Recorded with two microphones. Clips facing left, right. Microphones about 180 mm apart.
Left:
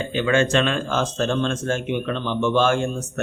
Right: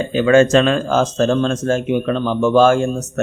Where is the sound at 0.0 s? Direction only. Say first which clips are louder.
Right 8 dB; 40° right (ahead or behind).